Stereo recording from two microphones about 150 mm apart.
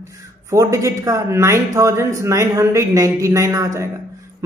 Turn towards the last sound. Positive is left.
turn(degrees=-20)  # may be behind; listen again after turning